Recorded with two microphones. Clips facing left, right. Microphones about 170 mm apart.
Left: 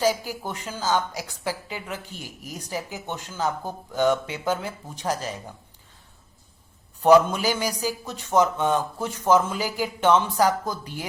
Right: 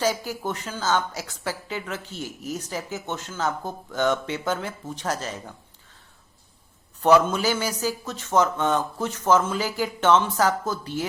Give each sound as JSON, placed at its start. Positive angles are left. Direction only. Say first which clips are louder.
{"t": 0.0, "sound": "a man's voice", "louder": "left 1 dB", "side_deg": 10}
{"t": 7.0, "sound": "a man's voice", "louder": "left 2 dB", "side_deg": 10}